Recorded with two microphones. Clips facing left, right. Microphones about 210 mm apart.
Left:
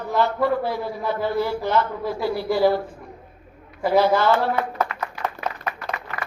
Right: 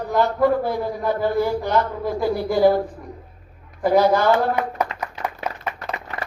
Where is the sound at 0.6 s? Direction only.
45° right (ahead or behind).